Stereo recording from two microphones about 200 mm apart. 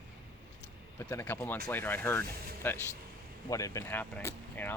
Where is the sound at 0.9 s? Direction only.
10° left (ahead or behind).